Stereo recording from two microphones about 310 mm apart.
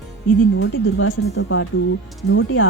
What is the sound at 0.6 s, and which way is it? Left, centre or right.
Speech, left.